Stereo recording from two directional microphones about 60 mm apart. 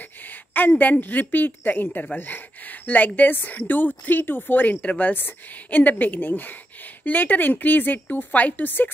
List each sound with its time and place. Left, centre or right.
0.3 s speech: left